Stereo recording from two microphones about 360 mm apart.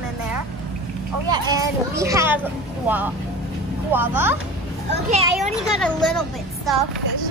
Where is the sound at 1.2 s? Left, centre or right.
Centre.